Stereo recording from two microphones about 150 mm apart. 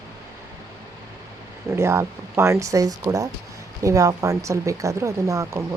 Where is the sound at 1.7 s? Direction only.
15° right (ahead or behind).